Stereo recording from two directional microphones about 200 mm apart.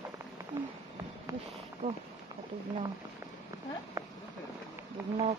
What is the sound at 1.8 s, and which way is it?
Speech, 40° right (ahead or behind).